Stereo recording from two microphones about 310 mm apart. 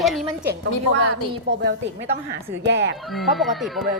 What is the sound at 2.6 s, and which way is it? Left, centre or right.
Speech, right.